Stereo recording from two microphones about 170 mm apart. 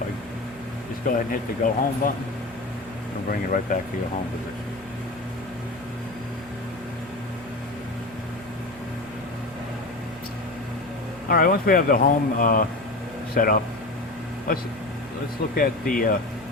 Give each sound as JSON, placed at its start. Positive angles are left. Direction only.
{"t": 1.0, "sound": "speech", "side_deg": 55}
{"t": 3.2, "sound": "speech", "side_deg": 55}
{"t": 11.3, "sound": "speech", "side_deg": 60}
{"t": 15.5, "sound": "speech", "side_deg": 55}